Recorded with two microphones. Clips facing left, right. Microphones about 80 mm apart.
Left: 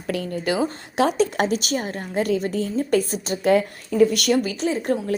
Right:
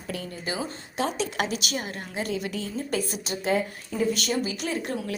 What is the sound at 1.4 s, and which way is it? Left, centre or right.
A woman's voice, left.